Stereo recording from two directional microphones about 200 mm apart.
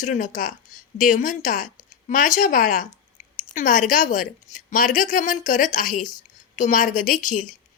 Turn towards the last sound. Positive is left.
turn(degrees=40)  # may be behind; listen again after turning